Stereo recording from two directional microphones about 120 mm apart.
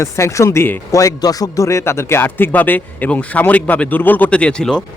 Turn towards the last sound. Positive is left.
turn(degrees=5)  # may be behind; listen again after turning